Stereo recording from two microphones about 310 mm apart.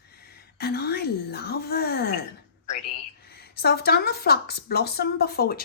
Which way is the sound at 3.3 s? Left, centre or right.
Left.